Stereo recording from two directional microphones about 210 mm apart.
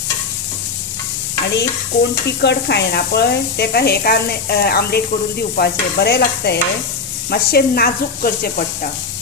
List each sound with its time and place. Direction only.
1.5 s stir: 55° left (ahead or behind)